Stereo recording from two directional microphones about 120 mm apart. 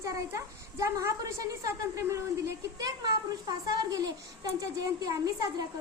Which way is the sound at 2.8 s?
30° right (ahead or behind).